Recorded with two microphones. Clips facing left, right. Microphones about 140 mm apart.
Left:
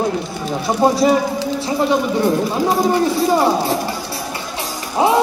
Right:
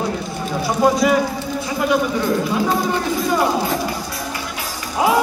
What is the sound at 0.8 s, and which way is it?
Music, 30° left (ahead or behind).